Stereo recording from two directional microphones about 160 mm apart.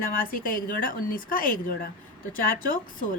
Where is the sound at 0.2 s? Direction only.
60° left (ahead or behind).